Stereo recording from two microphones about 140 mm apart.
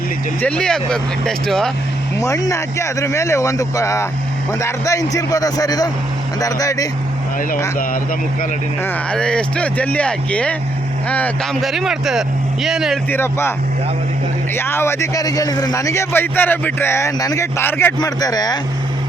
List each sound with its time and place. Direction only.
0.4 s speech: 5° left (ahead or behind)
2.1 s speech: 25° left (ahead or behind)
9.1 s speech: 5° left (ahead or behind)
11.6 s speech: centre (ahead or behind)
13.1 s speech: 15° left (ahead or behind)
14.5 s speech: 15° left (ahead or behind)
18.0 s speech: 25° left (ahead or behind)